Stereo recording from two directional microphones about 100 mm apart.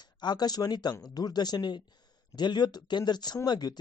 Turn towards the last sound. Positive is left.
turn(degrees=45)  # may be behind; listen again after turning